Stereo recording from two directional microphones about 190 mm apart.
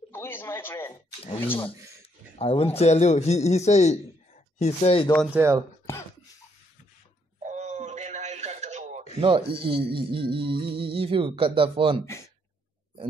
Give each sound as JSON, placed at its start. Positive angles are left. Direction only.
{"t": 0.1, "sound": "speech", "side_deg": 10}
{"t": 2.3, "sound": "speech", "side_deg": 30}
{"t": 5.3, "sound": "speech", "side_deg": -10}
{"t": 7.4, "sound": "a sound", "side_deg": -40}
{"t": 9.2, "sound": "speech", "side_deg": -25}